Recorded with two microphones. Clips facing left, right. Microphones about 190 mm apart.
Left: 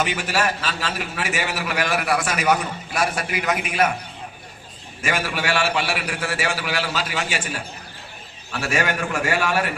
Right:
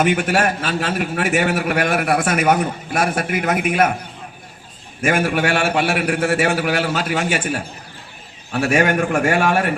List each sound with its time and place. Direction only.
0.0 s a man's voice: 55° right (ahead or behind)
5.0 s a man's voice: 55° right (ahead or behind)